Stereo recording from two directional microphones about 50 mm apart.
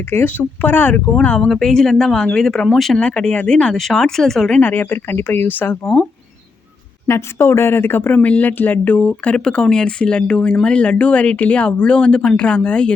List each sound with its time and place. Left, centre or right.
0.1 s speech: left
1.2 s speech: left
1.5 s speech: centre
3.0 s speech: centre
4.6 s speech: left
5.8 s speech: centre
7.1 s speech: left
8.1 s speech: left
9.3 s speech: centre